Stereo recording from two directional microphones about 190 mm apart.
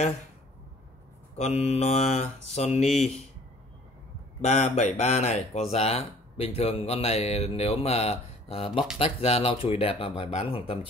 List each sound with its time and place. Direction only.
1.3 s speech: 35° left (ahead or behind)
4.4 s speech: 35° left (ahead or behind)